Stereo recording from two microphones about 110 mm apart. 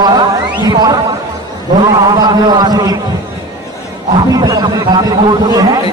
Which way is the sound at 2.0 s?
40° right (ahead or behind).